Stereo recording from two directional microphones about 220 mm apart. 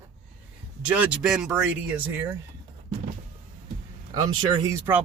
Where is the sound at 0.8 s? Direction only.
5° right (ahead or behind).